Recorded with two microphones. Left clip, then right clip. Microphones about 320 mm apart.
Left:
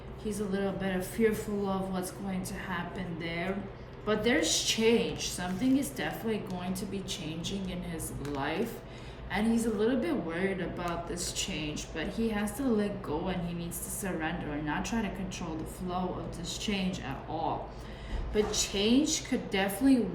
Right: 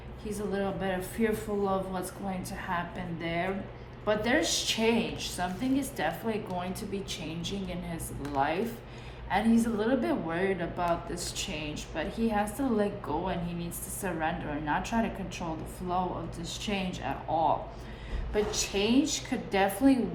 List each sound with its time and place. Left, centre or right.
0.3 s a woman's voice: centre
9.3 s a woman's voice: centre
16.5 s a woman's voice: centre
18.5 s a woman's voice: centre